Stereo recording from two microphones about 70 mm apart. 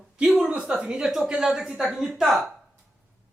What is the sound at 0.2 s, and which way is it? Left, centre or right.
Speech, centre.